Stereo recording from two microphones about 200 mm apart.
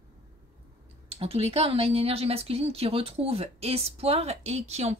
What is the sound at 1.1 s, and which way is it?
Speech, 30° right (ahead or behind).